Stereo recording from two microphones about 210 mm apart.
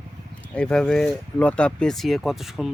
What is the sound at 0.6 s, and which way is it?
Speech, 5° left (ahead or behind).